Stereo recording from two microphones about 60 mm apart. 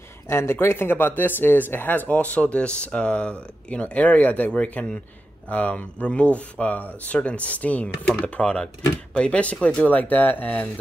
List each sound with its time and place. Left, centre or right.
0.3 s speech: left